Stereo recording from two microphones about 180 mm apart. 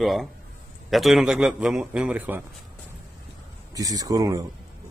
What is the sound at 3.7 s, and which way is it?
Speech, 20° right (ahead or behind).